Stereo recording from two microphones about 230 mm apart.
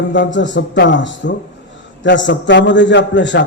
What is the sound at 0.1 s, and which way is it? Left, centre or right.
A man's voice, left.